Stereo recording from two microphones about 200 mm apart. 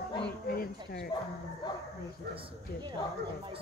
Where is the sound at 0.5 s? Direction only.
50° left (ahead or behind).